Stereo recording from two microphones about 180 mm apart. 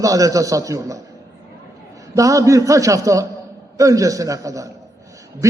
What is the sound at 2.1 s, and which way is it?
A man's voice, 20° right (ahead or behind).